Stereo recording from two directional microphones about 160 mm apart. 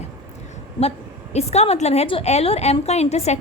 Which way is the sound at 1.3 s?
40° left (ahead or behind).